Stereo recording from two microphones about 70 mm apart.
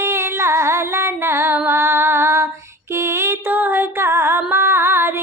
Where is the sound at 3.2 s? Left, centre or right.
Right.